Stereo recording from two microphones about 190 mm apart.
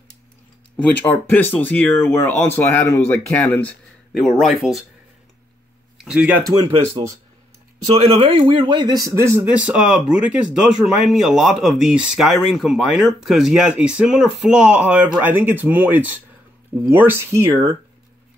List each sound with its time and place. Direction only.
0.7 s speech: 10° left (ahead or behind)
5.9 s speech: 5° right (ahead or behind)
7.8 s a man's voice: 30° right (ahead or behind); by 17.7 s 15° right (ahead or behind)